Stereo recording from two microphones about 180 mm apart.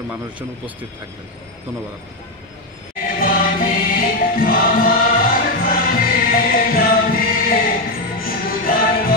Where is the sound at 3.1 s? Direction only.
50° left (ahead or behind).